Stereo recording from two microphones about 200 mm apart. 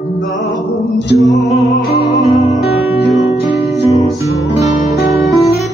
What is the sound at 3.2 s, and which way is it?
Music, 35° left (ahead or behind).